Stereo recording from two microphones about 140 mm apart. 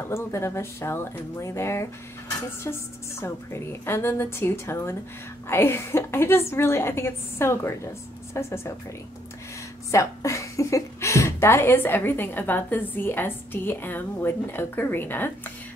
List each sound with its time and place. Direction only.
0.0 s speech: 20° left (ahead or behind)
3.2 s a woman's voice: 20° left (ahead or behind)
9.8 s a woman's voice: 20° left (ahead or behind)